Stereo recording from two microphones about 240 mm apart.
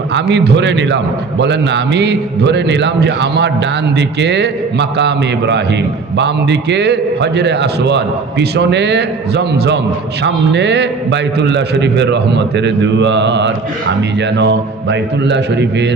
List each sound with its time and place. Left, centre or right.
0.1 s a man's voice: right